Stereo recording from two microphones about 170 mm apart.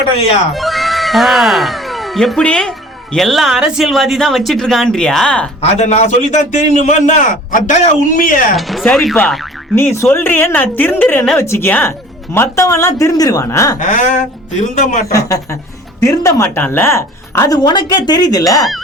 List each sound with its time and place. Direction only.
0.5 s speech: centre (ahead or behind)
5.7 s a man's voice: 40° left (ahead or behind)
8.5 s speech: centre (ahead or behind)
9.7 s a woman's voice: 15° left (ahead or behind)
13.7 s a man's voice: 50° left (ahead or behind)
15.0 s speech: 20° left (ahead or behind)